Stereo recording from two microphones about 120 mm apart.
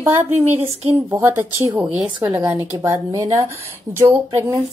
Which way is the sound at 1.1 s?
20° right (ahead or behind).